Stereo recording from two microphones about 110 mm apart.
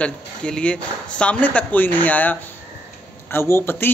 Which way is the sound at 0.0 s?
10° left (ahead or behind).